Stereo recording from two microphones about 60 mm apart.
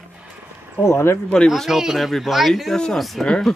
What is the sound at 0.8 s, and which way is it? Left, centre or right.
Speech, left.